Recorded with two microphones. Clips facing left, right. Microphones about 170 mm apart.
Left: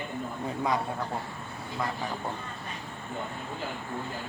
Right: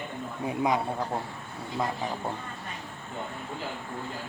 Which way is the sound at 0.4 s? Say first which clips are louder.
Right 3 dB; 20° right (ahead or behind).